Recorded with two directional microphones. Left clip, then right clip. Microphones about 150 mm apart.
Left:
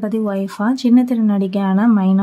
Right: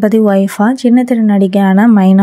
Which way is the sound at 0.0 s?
45° right (ahead or behind).